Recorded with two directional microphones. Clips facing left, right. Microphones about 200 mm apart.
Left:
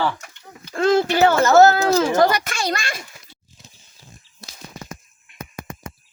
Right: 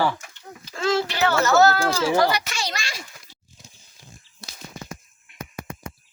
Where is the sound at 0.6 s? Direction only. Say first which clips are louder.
Left 6 dB; 55° left (ahead or behind).